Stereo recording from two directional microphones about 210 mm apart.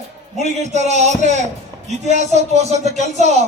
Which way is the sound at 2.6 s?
30° right (ahead or behind).